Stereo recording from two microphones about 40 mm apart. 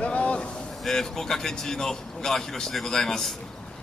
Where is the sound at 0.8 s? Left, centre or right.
Centre.